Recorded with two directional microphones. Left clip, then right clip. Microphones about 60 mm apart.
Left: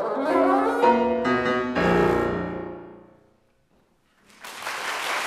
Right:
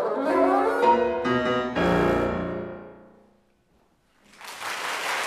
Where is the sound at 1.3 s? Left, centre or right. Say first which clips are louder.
Left 1 dB; centre.